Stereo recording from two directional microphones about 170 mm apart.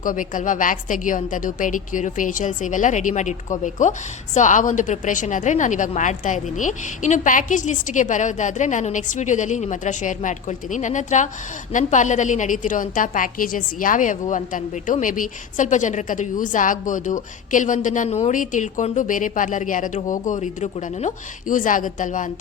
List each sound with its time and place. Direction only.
0.0 s a woman's voice: 50° left (ahead or behind)